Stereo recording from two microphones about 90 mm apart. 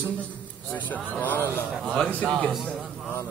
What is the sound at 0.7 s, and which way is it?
A man's voice, 20° left (ahead or behind).